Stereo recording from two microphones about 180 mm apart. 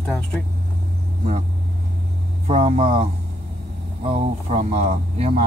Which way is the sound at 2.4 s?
35° right (ahead or behind).